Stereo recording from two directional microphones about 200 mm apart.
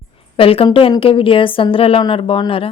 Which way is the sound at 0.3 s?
30° left (ahead or behind).